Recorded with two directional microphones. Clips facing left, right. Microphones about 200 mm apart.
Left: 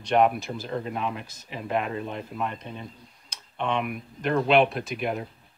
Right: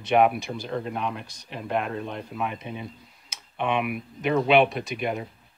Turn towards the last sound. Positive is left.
turn(degrees=0)  # may be behind; listen again after turning